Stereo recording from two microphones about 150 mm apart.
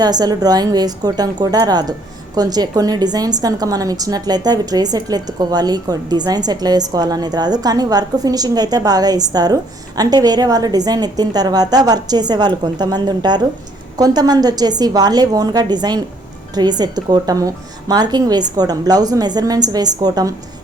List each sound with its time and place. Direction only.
0.0 s a woman's voice: 25° right (ahead or behind)